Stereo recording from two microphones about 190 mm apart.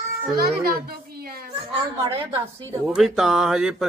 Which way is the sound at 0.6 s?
55° right (ahead or behind).